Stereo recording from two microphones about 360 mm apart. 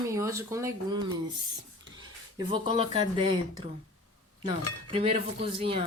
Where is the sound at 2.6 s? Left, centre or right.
Centre.